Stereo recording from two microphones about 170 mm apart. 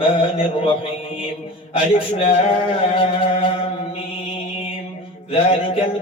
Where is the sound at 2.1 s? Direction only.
35° left (ahead or behind).